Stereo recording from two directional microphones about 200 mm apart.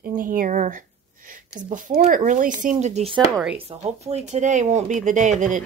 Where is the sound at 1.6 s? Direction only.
40° right (ahead or behind).